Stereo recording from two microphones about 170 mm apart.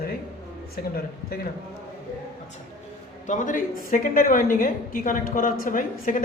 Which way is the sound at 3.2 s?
45° left (ahead or behind).